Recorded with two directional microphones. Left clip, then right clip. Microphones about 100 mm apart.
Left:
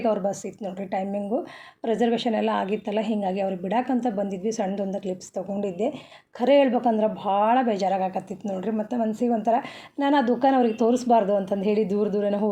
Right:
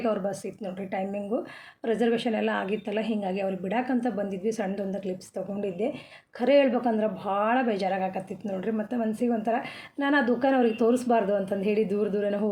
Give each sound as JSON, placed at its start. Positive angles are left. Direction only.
{"t": 0.0, "sound": "a woman's voice", "side_deg": 30}